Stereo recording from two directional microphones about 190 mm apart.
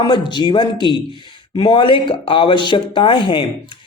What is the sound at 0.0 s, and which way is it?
Speech, 25° left (ahead or behind).